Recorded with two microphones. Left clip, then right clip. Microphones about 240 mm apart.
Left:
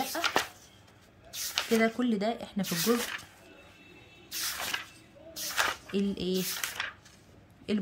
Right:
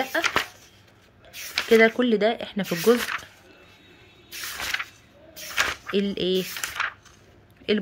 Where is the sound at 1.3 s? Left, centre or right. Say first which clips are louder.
Right 4 dB; left.